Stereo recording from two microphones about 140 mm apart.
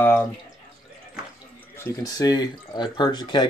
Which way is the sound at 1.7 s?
20° left (ahead or behind).